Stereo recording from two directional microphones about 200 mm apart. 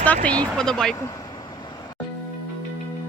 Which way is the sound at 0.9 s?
15° left (ahead or behind).